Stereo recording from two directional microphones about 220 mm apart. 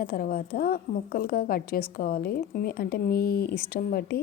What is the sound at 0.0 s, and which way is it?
A woman's voice, 40° left (ahead or behind).